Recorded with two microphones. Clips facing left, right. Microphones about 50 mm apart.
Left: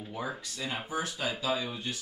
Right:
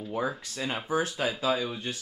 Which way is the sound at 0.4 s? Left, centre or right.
Right.